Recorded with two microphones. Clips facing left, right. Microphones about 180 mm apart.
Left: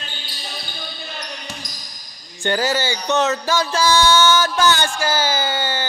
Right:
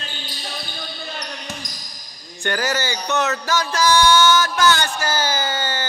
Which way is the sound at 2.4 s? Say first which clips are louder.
Left 3 dB; 15° left (ahead or behind).